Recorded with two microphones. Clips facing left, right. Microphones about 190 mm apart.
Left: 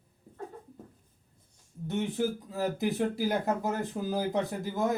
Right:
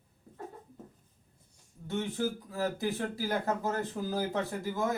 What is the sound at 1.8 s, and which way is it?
Speech, 15° left (ahead or behind).